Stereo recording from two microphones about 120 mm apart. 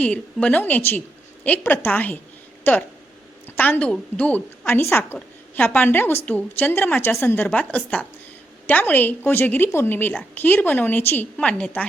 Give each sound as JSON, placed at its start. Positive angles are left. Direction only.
{"t": 0.0, "sound": "a woman's voice", "side_deg": 10}